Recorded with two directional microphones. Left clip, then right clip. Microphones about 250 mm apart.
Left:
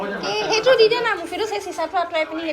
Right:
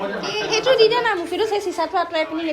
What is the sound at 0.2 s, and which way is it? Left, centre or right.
A woman's voice, centre.